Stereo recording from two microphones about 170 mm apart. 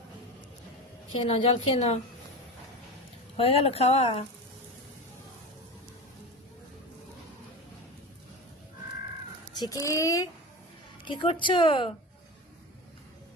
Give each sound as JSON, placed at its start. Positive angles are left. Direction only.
{"t": 1.2, "sound": "speech", "side_deg": 30}
{"t": 3.3, "sound": "speech", "side_deg": 35}
{"t": 9.6, "sound": "a woman's voice", "side_deg": 20}